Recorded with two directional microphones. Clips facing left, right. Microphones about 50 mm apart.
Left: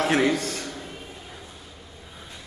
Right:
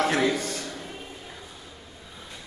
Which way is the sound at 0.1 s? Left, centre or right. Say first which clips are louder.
Left 3 dB; left.